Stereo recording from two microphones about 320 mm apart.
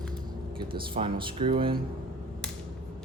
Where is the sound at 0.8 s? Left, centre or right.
Centre.